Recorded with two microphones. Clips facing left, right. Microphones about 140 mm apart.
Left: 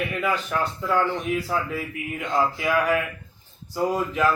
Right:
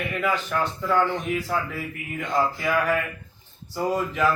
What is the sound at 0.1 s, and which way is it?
Speech, 5° left (ahead or behind).